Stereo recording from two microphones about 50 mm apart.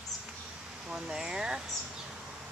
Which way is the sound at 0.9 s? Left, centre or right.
Centre.